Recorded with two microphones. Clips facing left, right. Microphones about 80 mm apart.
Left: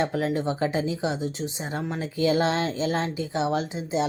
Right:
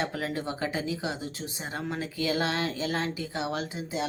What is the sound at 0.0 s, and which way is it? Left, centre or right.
Speech, left.